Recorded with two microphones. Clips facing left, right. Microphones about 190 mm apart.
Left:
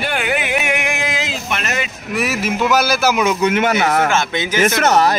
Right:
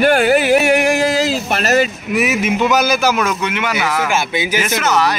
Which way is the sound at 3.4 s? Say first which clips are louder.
Left 4 dB; 45° left (ahead or behind).